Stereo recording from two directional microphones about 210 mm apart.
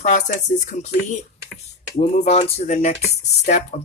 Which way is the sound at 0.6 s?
35° left (ahead or behind).